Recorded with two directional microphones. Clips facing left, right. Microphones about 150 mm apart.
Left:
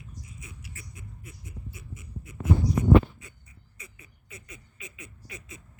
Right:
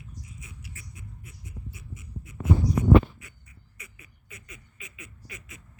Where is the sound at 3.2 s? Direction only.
25° left (ahead or behind).